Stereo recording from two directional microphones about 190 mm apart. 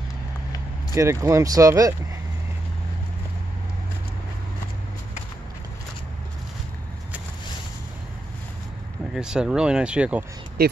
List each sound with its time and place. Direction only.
0.9 s speech: 15° right (ahead or behind)
9.1 s speech: 5° right (ahead or behind)
10.6 s speech: 55° right (ahead or behind)